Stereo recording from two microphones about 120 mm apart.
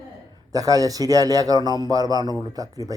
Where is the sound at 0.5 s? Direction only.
30° right (ahead or behind).